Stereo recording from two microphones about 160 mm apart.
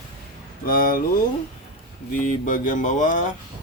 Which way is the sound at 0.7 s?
60° left (ahead or behind).